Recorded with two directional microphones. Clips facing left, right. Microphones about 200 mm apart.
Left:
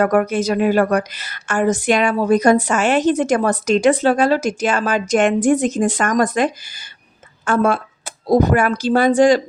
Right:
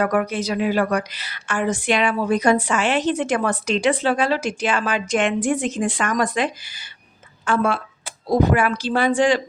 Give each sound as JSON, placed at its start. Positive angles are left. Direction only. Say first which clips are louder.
{"t": 0.0, "sound": "a woman's voice", "louder": "left 5 dB", "side_deg": 45}